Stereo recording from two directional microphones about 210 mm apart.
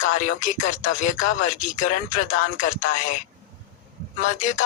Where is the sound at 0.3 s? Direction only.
35° left (ahead or behind).